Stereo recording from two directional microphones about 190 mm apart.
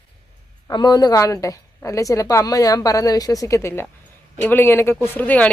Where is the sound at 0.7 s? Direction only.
20° left (ahead or behind).